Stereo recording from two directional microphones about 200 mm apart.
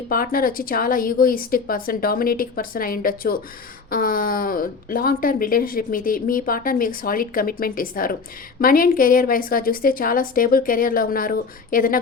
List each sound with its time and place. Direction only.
0.1 s speech: 45° left (ahead or behind)